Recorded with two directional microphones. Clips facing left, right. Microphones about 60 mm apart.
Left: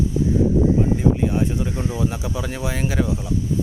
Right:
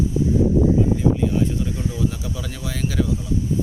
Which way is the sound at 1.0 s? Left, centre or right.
Left.